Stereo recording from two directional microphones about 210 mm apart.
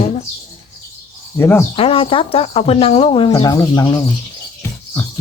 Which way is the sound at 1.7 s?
25° left (ahead or behind).